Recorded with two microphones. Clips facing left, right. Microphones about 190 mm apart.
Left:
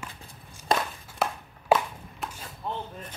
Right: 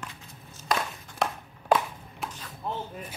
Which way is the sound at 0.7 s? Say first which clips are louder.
Left 2 dB; 25° left (ahead or behind).